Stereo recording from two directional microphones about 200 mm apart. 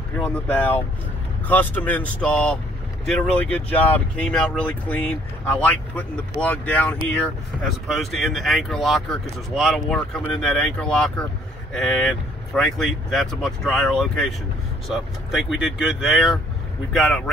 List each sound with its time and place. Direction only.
0.2 s speech: 5° left (ahead or behind)